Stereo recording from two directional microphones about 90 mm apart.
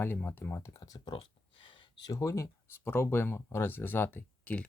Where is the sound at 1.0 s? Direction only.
65° left (ahead or behind).